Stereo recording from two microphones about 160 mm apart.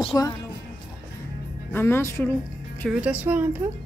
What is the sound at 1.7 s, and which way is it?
Speech, 15° left (ahead or behind).